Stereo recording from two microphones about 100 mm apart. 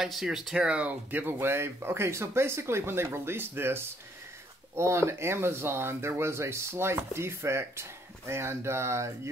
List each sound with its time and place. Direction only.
0.0 s speech: 5° right (ahead or behind); by 9.3 s 30° right (ahead or behind)